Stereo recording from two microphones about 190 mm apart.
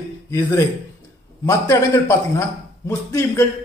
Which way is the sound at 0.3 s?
15° left (ahead or behind).